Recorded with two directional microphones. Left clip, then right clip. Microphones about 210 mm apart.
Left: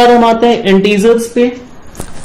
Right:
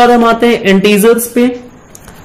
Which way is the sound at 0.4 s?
30° right (ahead or behind).